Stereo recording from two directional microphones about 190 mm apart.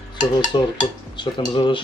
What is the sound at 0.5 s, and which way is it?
Speech, 20° left (ahead or behind).